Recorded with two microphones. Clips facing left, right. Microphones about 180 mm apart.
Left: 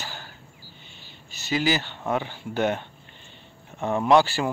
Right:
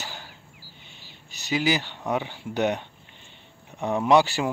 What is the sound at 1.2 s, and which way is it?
Speech, 15° right (ahead or behind).